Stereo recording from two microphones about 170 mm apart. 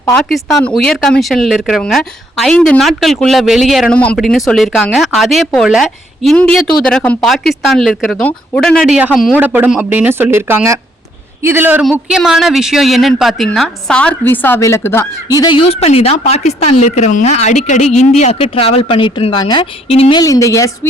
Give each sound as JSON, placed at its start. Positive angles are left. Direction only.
{"t": 0.0, "sound": "a woman's voice", "side_deg": 5}